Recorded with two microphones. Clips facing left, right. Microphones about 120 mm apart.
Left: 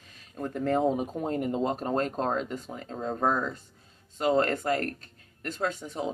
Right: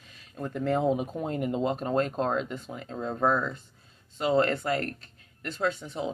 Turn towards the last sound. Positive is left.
turn(degrees=45)  # may be behind; listen again after turning